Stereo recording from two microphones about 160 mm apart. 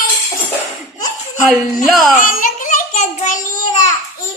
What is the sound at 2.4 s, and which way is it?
Child singing, 55° left (ahead or behind).